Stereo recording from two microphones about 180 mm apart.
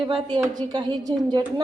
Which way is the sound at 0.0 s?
30° right (ahead or behind).